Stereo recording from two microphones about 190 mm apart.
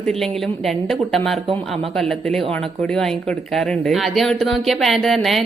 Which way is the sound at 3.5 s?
Centre (ahead or behind).